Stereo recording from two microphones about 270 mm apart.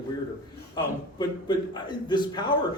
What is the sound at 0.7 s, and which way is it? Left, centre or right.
A man's voice, centre.